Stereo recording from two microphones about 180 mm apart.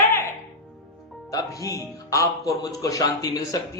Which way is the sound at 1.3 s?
20° left (ahead or behind).